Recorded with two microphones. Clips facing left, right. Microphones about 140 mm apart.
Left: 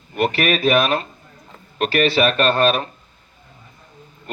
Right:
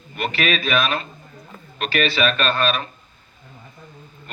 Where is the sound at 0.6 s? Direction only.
45° left (ahead or behind).